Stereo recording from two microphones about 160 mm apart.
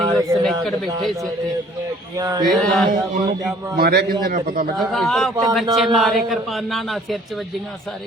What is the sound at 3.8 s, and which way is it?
Speech, 85° right.